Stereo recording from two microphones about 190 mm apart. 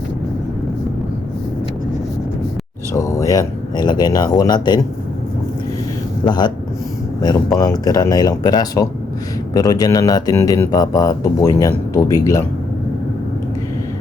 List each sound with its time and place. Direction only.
2.9 s speech: 15° left (ahead or behind)
6.2 s speech: 25° left (ahead or behind)
7.6 s speech: 20° left (ahead or behind)